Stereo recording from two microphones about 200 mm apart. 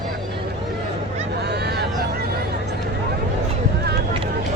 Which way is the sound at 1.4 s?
55° right (ahead or behind).